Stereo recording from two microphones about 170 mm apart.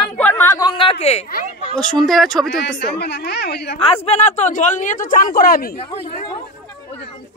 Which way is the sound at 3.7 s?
35° left (ahead or behind).